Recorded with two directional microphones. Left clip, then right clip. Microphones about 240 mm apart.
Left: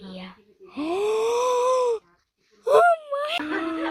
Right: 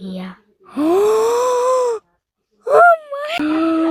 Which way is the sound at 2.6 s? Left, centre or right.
Right.